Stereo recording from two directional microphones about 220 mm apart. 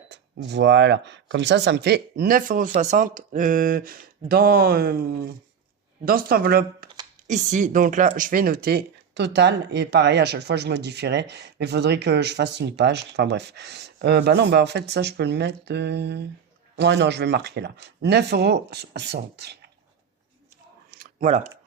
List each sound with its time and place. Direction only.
0.1 s speech: 50° right (ahead or behind)
7.3 s speech: 35° right (ahead or behind)
20.9 s a sound: 40° right (ahead or behind)